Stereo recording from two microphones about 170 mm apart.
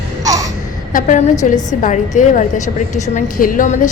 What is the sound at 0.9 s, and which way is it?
A woman's voice, 45° left (ahead or behind).